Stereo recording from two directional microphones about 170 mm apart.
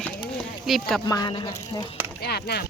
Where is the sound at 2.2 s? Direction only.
70° left (ahead or behind).